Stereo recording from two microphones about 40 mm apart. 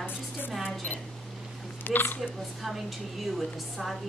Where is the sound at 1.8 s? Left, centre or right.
Left.